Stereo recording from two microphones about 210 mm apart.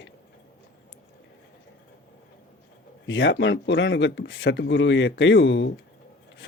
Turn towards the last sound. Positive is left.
turn(degrees=60)  # may be behind; listen again after turning